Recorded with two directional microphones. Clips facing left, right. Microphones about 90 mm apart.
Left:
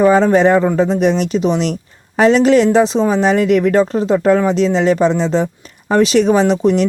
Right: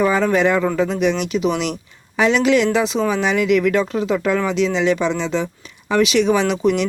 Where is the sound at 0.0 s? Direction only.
35° left (ahead or behind).